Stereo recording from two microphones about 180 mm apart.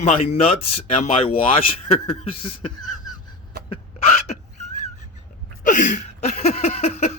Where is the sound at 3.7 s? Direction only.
35° left (ahead or behind).